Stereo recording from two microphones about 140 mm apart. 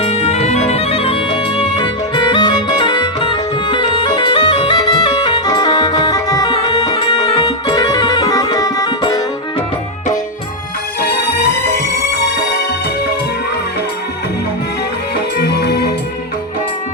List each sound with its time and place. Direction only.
0.0 s music: 50° left (ahead or behind); by 9.2 s 30° left (ahead or behind)